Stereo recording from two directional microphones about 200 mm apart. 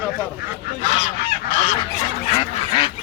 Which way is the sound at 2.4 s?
20° left (ahead or behind).